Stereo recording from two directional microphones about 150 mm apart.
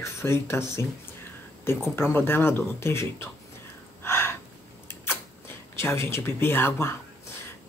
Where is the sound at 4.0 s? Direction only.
15° left (ahead or behind).